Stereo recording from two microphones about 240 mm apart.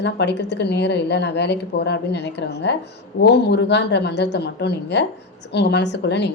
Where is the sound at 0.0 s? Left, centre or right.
Left.